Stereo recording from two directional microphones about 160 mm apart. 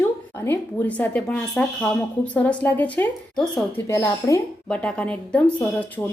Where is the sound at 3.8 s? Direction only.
20° left (ahead or behind).